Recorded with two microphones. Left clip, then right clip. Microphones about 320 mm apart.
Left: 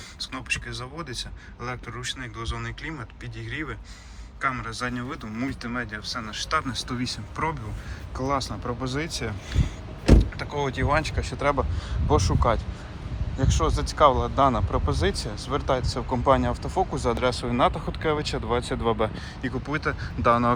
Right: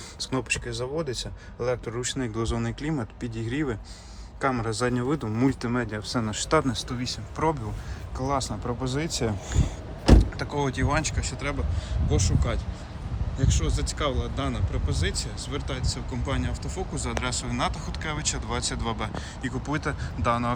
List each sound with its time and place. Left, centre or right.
0.2 s speech: centre
10.1 s speech: centre